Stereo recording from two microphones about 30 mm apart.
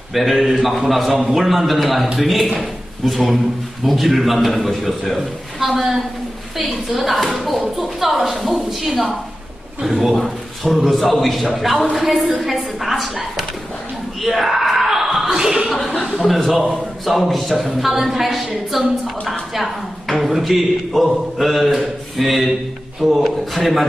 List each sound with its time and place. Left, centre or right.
0.1 s a man's voice: centre
14.2 s screaming: centre
15.4 s speech: centre
16.3 s speech: centre